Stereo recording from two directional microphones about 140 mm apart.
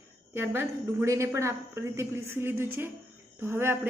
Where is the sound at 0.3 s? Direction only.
15° right (ahead or behind).